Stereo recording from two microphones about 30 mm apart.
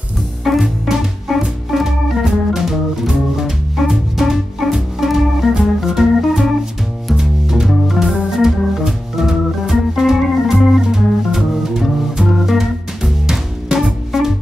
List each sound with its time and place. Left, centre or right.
0.4 s music: centre
1.3 s organ: centre
3.8 s music: centre
4.2 s organ: centre
7.2 s music: centre
7.6 s organ: centre
10.9 s music: centre